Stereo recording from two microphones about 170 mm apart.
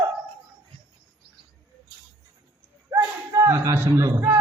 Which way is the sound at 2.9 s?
15° right (ahead or behind).